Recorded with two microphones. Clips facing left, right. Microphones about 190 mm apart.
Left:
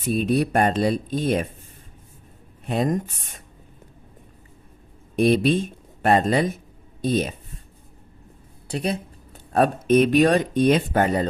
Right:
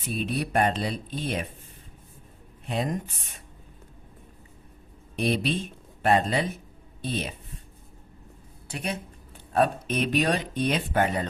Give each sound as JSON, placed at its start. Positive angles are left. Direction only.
{"t": 0.1, "sound": "speech", "side_deg": 45}
{"t": 2.6, "sound": "speech", "side_deg": 45}
{"t": 5.1, "sound": "speech", "side_deg": 45}
{"t": 8.7, "sound": "speech", "side_deg": 35}